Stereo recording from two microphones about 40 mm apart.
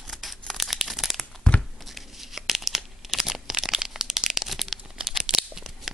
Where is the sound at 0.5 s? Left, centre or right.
Centre.